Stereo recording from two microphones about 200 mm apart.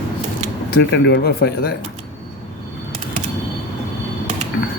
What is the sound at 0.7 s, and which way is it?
A man's voice, 55° left (ahead or behind).